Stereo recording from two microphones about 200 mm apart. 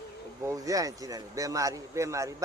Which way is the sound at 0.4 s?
15° right (ahead or behind).